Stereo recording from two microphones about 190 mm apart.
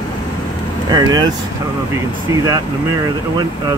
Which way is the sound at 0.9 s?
20° right (ahead or behind).